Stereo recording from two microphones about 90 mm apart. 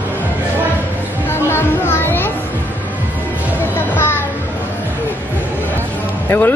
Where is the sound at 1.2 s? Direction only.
25° left (ahead or behind).